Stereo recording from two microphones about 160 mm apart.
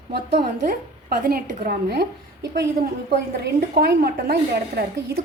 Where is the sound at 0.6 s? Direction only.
55° right (ahead or behind); by 5.2 s 90° right.